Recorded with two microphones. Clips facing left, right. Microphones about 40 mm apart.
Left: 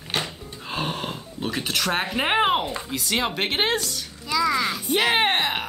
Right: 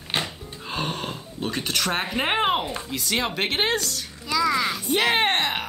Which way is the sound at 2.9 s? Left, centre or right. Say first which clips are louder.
Left 1 dB; centre.